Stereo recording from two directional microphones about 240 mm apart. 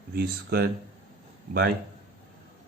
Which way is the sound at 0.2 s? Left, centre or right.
Right.